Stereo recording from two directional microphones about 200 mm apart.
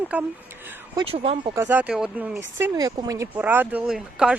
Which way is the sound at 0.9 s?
30° right (ahead or behind).